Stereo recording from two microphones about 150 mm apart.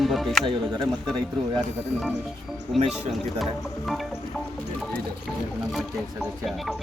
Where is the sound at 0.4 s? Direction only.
30° right (ahead or behind).